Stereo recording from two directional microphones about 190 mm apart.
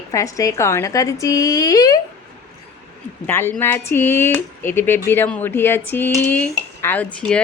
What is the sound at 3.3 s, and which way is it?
A woman's voice, 10° left (ahead or behind).